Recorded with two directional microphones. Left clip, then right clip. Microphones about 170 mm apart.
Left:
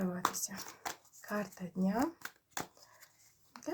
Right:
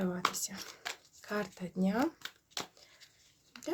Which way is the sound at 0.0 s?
25° right (ahead or behind).